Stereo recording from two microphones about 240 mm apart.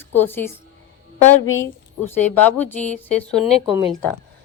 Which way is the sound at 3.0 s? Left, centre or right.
Centre.